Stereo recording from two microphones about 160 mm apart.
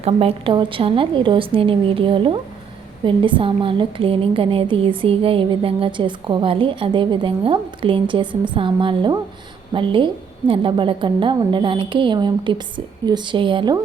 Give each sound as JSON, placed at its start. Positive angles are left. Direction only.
{"t": 0.0, "sound": "a woman's voice", "side_deg": -40}